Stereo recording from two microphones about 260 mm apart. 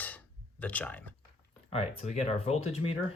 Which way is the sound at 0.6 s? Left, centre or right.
Centre.